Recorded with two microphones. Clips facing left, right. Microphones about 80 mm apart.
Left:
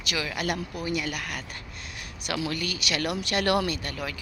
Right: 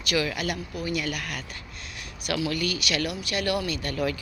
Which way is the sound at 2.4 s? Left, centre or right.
Left.